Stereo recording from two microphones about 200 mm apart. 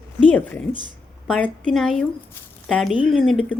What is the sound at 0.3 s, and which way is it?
A woman's voice, 5° left (ahead or behind).